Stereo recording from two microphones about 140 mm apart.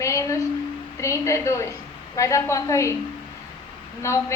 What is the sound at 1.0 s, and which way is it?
A woman's voice, 20° left (ahead or behind).